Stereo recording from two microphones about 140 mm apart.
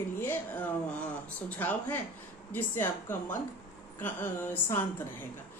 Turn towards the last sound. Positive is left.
turn(degrees=15)  # may be behind; listen again after turning